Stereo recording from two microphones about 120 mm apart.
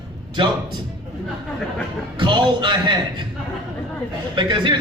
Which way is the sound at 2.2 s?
40° right (ahead or behind).